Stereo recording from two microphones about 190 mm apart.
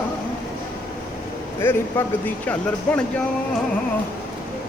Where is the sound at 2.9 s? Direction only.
5° left (ahead or behind).